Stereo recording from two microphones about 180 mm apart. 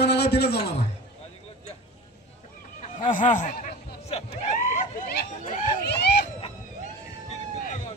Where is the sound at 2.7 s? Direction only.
45° left (ahead or behind).